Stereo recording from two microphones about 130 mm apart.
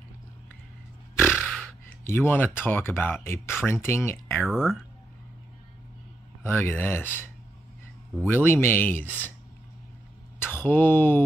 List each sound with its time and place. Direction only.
1.3 s a sound: centre (ahead or behind)
2.0 s speech: 15° left (ahead or behind)
4.5 s speech: 5° right (ahead or behind)
6.4 s speech: 15° left (ahead or behind)
10.4 s speech: 15° left (ahead or behind)